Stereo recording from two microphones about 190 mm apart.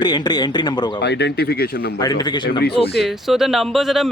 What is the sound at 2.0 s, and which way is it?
Speech, 20° left (ahead or behind).